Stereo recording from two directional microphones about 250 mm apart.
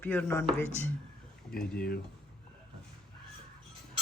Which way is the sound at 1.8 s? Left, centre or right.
Left.